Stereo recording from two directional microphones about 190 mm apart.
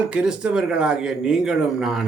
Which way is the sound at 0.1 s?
5° right (ahead or behind).